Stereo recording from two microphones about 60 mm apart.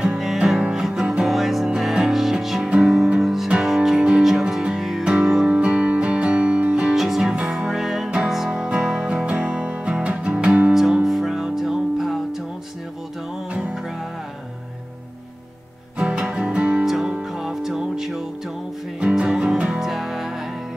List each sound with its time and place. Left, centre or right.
0.7 s music: centre
16.0 s music: centre
16.8 s music: centre